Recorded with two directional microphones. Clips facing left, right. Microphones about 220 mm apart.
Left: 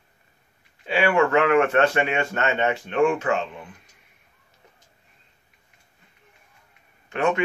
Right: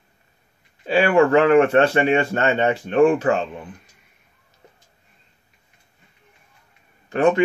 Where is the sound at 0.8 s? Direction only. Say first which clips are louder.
Right 4 dB; 35° right (ahead or behind).